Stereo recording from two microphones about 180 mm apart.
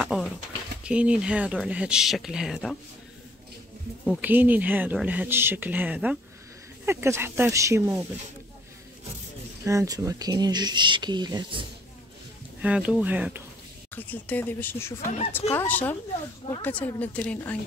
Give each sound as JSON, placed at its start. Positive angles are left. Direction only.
{"t": 0.0, "sound": "a sound", "side_deg": 0}
{"t": 0.8, "sound": "speech", "side_deg": -5}
{"t": 4.0, "sound": "speech", "side_deg": -5}
{"t": 9.7, "sound": "speech", "side_deg": -20}
{"t": 12.6, "sound": "speech", "side_deg": -5}
{"t": 13.9, "sound": "speech", "side_deg": 10}